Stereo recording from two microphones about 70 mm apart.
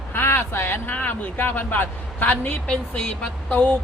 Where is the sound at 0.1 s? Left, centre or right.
Left; by 3.7 s centre.